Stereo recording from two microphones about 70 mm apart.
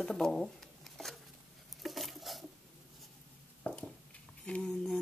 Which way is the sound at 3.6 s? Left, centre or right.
Left.